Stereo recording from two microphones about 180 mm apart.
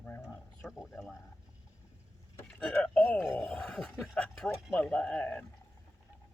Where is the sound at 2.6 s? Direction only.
5° left (ahead or behind).